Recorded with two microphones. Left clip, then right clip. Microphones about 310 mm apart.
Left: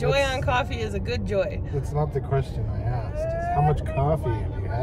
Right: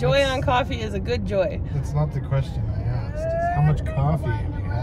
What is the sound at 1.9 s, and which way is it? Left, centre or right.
Speech, left.